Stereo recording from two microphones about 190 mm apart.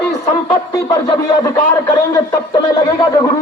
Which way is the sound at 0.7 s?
15° left (ahead or behind).